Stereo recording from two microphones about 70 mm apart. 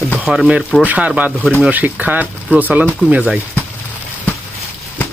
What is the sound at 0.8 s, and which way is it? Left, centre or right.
Speech, right.